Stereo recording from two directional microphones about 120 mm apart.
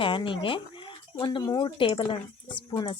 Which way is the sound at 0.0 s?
45° left (ahead or behind).